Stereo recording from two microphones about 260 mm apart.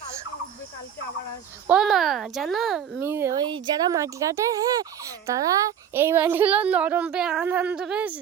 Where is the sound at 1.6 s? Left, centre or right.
Centre.